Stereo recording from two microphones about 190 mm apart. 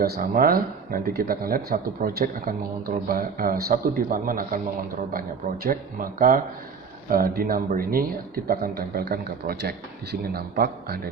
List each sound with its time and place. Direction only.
0.0 s speech: 50° right (ahead or behind)
5.6 s a man's voice: 45° right (ahead or behind)